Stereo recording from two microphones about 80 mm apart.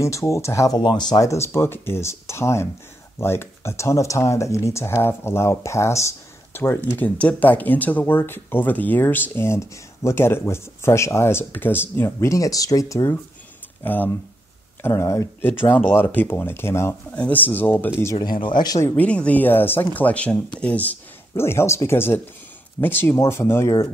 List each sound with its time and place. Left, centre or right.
0.0 s speech: left
0.7 s speech: left
1.2 s speech: left
12.3 s speech: left
13.8 s speech: left
14.8 s speech: left
15.4 s speech: left
17.1 s speech: centre
18.1 s speech: left
18.9 s speech: centre
21.4 s speech: left